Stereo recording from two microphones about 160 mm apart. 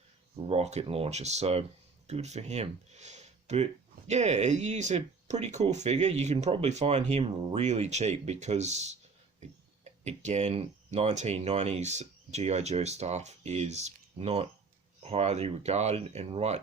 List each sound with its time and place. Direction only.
0.4 s speech: 40° right (ahead or behind)